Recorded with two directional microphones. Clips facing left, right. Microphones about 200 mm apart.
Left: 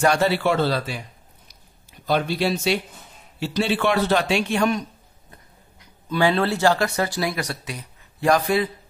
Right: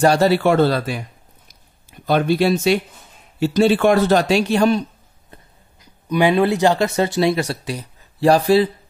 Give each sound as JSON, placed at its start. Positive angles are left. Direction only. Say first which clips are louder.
{"t": 0.0, "sound": "speech", "louder": "right 5 dB", "side_deg": -35}
{"t": 1.5, "sound": "a sound", "louder": "right 3 dB", "side_deg": -50}
{"t": 3.3, "sound": "a man's voice", "louder": "right 8 dB", "side_deg": -45}
{"t": 6.0, "sound": "speech", "louder": "right 5 dB", "side_deg": -15}